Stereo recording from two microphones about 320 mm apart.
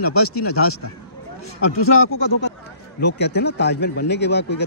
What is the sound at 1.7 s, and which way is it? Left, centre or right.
Speech, left.